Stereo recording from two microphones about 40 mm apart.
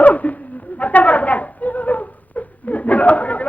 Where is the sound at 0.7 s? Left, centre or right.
Left.